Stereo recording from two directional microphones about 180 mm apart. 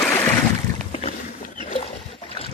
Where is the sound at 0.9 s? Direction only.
35° left (ahead or behind).